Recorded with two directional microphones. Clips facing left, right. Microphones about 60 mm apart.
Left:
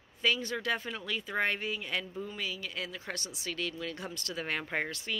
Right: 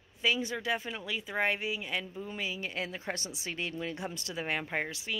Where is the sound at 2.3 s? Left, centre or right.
Right.